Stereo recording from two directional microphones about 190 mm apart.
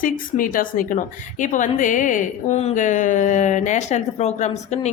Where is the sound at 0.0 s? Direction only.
45° left (ahead or behind).